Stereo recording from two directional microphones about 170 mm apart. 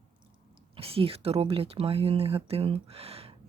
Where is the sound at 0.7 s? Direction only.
35° right (ahead or behind).